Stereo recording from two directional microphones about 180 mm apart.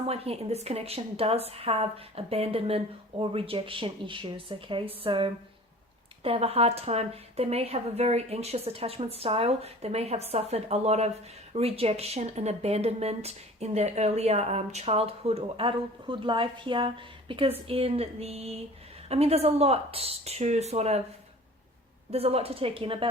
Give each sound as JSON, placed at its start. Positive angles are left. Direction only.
{"t": 0.1, "sound": "speech", "side_deg": -35}
{"t": 22.1, "sound": "speech", "side_deg": -35}